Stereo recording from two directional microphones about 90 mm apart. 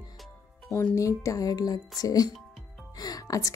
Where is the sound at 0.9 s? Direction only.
35° left (ahead or behind).